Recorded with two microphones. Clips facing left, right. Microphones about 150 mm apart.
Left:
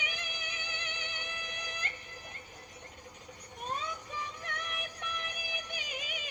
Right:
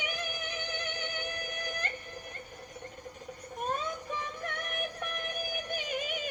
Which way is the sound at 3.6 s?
45° right (ahead or behind).